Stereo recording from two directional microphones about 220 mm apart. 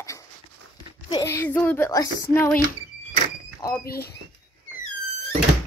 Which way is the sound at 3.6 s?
15° left (ahead or behind).